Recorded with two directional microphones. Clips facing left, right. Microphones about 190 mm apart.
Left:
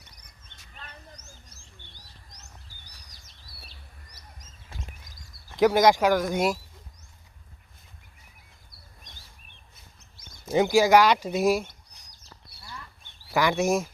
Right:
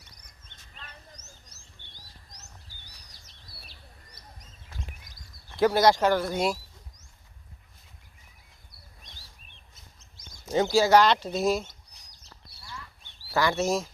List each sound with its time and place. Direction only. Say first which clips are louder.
5.1 s a sound: left 1 dB; 45° left (ahead or behind)
5.5 s speech: left 2 dB; 15° left (ahead or behind)
10.5 s speech: left 2 dB; 15° left (ahead or behind)
13.3 s speech: left 2 dB; 15° left (ahead or behind)